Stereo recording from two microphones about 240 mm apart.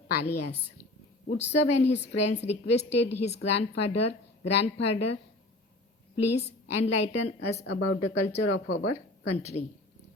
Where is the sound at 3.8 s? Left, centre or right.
Left.